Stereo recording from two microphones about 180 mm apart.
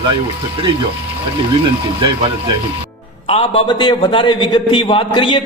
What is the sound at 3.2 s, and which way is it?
A man's voice, 30° left (ahead or behind).